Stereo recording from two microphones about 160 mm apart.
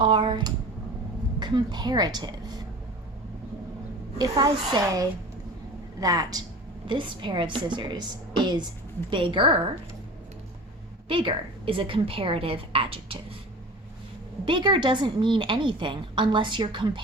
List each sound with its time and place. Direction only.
0.0 s a woman's voice: 30° right (ahead or behind)
4.2 s a woman's voice: 25° right (ahead or behind)
11.1 s a woman's voice: 30° right (ahead or behind)
14.4 s a woman's voice: 30° right (ahead or behind)